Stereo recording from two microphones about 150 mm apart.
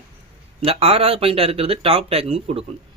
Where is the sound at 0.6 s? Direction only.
40° right (ahead or behind).